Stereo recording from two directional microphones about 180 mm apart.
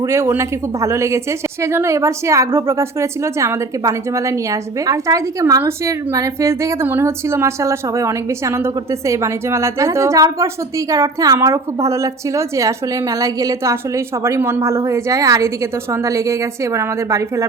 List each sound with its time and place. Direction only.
0.0 s a woman's voice: 15° right (ahead or behind)